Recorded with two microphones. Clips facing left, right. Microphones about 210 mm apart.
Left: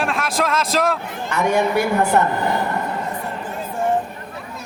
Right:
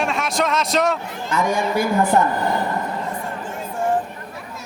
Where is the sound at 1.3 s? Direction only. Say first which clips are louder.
Left 2 dB; 65° left (ahead or behind).